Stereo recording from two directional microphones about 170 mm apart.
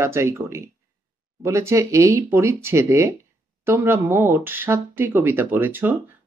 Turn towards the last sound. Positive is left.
turn(degrees=-10)  # may be behind; listen again after turning